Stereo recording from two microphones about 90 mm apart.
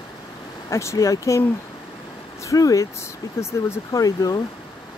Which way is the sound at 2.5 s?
40° left (ahead or behind).